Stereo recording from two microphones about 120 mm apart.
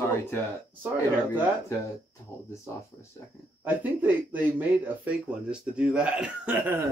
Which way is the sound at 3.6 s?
15° right (ahead or behind).